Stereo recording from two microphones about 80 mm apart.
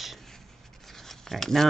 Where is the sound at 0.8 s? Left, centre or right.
Centre.